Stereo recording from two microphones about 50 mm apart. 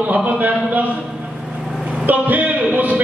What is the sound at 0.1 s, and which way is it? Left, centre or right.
Speech, right.